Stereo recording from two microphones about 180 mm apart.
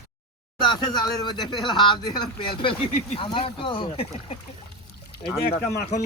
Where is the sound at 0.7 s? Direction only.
20° left (ahead or behind).